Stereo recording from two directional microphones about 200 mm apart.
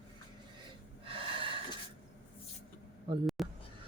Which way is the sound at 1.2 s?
25° right (ahead or behind).